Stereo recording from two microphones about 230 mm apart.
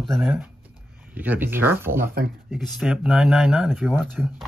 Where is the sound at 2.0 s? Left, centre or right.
Right.